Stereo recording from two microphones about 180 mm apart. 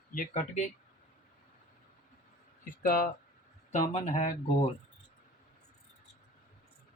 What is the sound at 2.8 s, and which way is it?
Speech, 55° left (ahead or behind).